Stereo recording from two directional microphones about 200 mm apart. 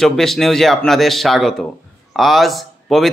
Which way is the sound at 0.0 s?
Centre (ahead or behind).